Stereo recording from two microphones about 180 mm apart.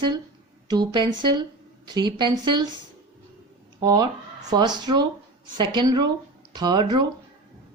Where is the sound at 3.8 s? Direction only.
20° right (ahead or behind).